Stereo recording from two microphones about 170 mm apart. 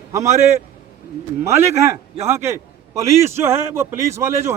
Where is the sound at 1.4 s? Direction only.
15° right (ahead or behind).